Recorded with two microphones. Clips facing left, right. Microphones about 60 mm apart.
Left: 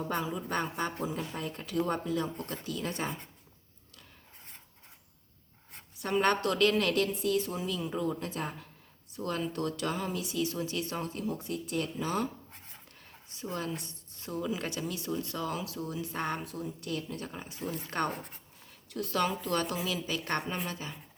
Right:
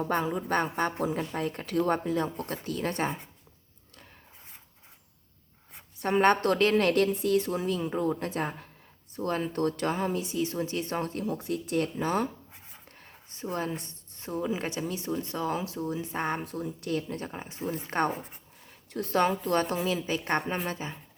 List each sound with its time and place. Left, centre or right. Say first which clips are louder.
0.0 s speech: right 5 dB; right
1.0 s speech: right 5 dB; right
6.0 s a woman's voice: right 5 dB; right
11.3 s speech: right 4 dB; right
12.5 s writing: right 1 dB; centre
13.0 s a woman's voice: right 3 dB; right
16.4 s speech: right 4 dB; right
17.2 s speech: right 4 dB; right
18.1 s speech: right 4 dB; centre
18.9 s a woman's voice: right 5 dB; right